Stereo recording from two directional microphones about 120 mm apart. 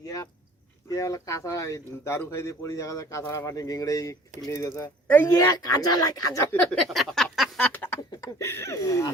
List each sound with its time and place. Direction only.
0.9 s speech: 30° left (ahead or behind)
5.3 s speech: 30° left (ahead or behind)
6.5 s speech: 10° left (ahead or behind)
6.8 s a sound: centre (ahead or behind)
7.7 s speech: 15° left (ahead or behind)